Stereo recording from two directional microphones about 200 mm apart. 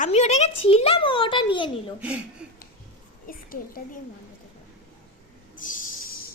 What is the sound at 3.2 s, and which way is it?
Speech, 45° left (ahead or behind).